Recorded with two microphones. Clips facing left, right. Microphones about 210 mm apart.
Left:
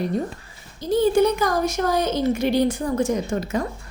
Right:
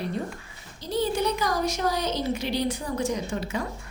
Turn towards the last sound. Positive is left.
turn(degrees=45)  # may be behind; listen again after turning